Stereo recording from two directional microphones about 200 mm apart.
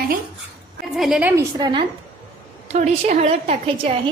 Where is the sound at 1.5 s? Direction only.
20° right (ahead or behind).